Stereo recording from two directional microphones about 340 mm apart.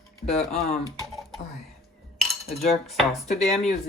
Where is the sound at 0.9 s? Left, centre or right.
Centre.